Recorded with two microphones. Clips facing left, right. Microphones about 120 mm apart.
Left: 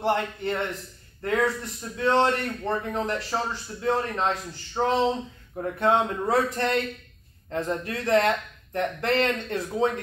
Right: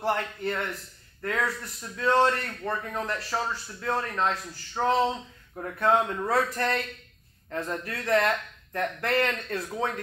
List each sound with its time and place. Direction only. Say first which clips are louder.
0.0 s a man's voice: left 3 dB; 20° left (ahead or behind)